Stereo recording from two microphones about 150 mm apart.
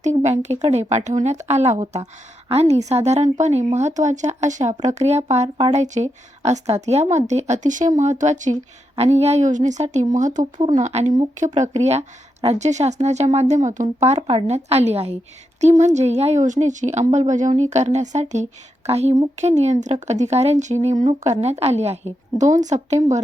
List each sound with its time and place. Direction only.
0.0 s speech: 50° right (ahead or behind)